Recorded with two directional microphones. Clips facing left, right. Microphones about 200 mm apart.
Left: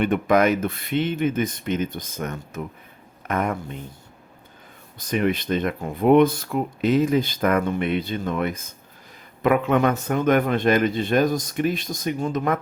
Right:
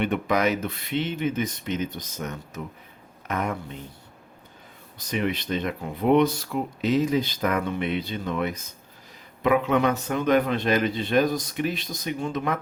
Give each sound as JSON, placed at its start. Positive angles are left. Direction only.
{"t": 0.0, "sound": "speech", "side_deg": 50}
{"t": 4.9, "sound": "speech", "side_deg": 50}